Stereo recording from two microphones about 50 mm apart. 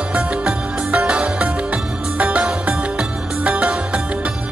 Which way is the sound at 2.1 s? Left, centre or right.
Right.